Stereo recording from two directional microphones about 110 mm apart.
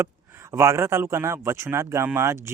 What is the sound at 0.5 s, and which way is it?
Speech, 25° right (ahead or behind).